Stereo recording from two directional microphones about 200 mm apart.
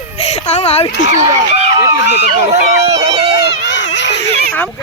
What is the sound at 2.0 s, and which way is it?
Speech, 60° left (ahead or behind).